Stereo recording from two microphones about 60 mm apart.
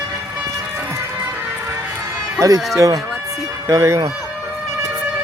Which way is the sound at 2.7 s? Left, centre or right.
Right.